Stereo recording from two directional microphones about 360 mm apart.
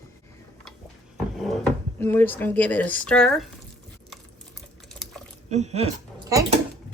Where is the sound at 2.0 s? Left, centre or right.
Centre.